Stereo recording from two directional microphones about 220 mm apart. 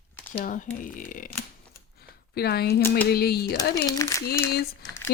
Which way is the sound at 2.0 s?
45° left (ahead or behind).